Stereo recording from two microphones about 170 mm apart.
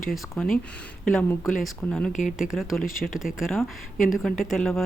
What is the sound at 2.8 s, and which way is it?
Speech, 55° left (ahead or behind).